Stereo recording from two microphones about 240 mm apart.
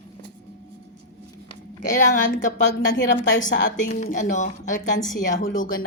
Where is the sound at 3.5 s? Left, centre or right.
Left.